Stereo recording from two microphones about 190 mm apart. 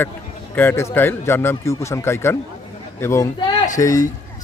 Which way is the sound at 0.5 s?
10° left (ahead or behind).